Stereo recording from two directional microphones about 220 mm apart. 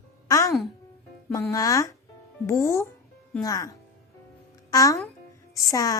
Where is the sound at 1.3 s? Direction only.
15° left (ahead or behind).